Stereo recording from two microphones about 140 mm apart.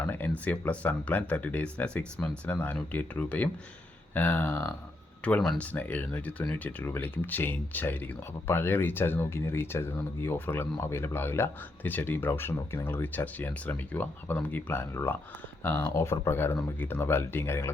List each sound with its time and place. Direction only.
0.0 s speech: 10° left (ahead or behind)